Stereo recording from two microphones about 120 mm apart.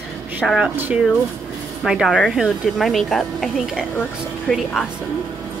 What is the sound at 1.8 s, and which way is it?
Speech, 5° right (ahead or behind).